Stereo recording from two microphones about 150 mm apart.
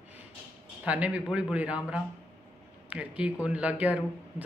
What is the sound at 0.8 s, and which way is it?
A woman's voice, 10° right (ahead or behind).